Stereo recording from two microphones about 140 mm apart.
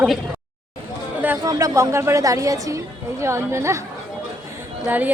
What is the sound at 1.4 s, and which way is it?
A woman's voice, 25° right (ahead or behind).